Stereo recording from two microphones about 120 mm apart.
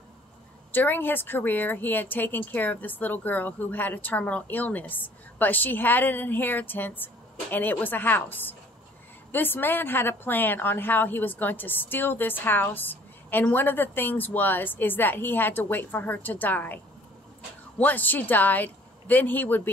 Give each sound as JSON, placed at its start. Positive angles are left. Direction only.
{"t": 0.7, "sound": "a woman's voice", "side_deg": 15}